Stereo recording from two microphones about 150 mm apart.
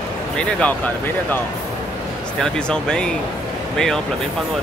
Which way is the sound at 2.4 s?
5° left (ahead or behind).